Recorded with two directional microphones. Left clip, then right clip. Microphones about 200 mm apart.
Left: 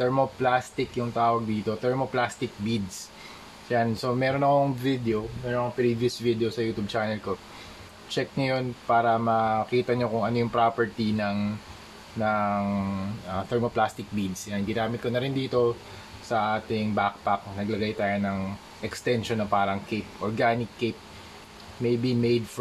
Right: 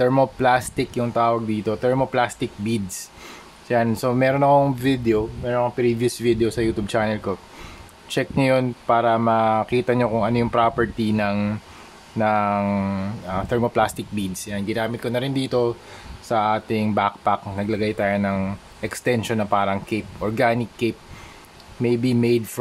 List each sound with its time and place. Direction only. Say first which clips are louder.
0.0 s speech: right 6 dB; 40° right (ahead or behind)